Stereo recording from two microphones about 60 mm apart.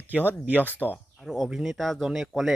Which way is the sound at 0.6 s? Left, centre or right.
Left.